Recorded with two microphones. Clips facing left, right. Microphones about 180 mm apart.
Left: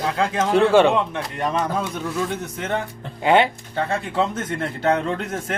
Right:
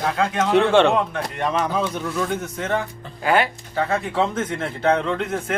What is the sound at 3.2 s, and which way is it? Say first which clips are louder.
Speech: left 3 dB; 25° left (ahead or behind).